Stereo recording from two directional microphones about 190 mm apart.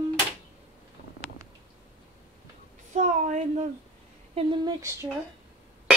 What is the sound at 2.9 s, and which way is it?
Speech, 40° right (ahead or behind).